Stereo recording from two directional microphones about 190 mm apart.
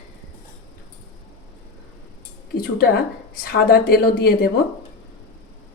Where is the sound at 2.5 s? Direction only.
55° left (ahead or behind).